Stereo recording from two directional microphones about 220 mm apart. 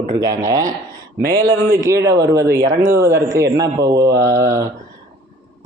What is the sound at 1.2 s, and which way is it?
Speech, 45° right (ahead or behind).